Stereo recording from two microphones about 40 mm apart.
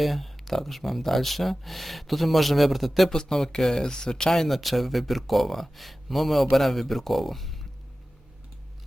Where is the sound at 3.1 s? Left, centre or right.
Centre.